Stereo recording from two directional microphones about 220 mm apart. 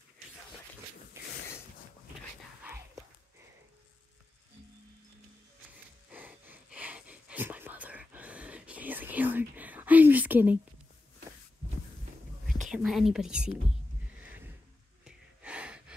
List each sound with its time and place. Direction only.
1.1 s mechanisms: 10° right (ahead or behind)
6.0 s whispering: 5° right (ahead or behind)
12.4 s whispering: 35° right (ahead or behind)
12.7 s speech: centre (ahead or behind)
14.2 s a sound: 5° right (ahead or behind)
15.0 s gasp: 5° right (ahead or behind)